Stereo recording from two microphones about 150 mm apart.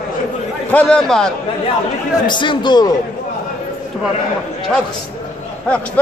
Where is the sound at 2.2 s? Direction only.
30° left (ahead or behind).